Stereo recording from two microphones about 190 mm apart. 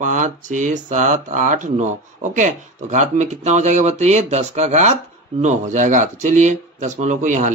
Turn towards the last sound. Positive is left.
turn(degrees=-40)  # may be behind; listen again after turning